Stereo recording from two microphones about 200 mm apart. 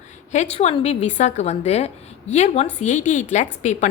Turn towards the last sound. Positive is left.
turn(degrees=35)  # may be behind; listen again after turning